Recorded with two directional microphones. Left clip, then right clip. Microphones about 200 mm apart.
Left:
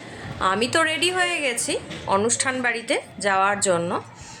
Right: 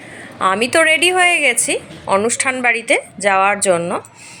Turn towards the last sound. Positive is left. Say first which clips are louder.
# right 6 dB
turn(degrees=-10)  # may be behind; listen again after turning